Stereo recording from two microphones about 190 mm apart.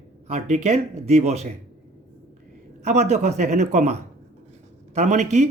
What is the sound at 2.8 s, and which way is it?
A man's voice, 35° right (ahead or behind).